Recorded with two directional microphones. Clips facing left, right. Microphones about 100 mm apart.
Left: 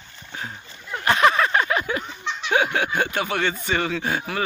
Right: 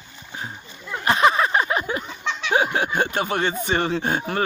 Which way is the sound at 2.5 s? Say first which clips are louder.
Even; 30° right (ahead or behind).